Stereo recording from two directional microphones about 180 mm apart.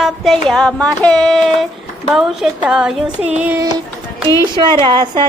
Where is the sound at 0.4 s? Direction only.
5° left (ahead or behind); by 3.7 s 10° right (ahead or behind).